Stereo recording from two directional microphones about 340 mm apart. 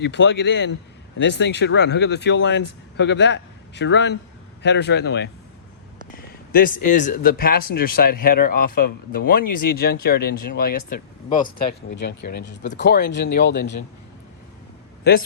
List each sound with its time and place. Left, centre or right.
0.0 s speech: left
6.1 s a sound: left
6.8 s speech: left
15.1 s speech: left